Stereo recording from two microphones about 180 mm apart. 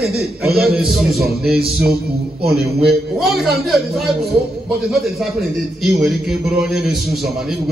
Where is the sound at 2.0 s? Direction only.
60° right (ahead or behind).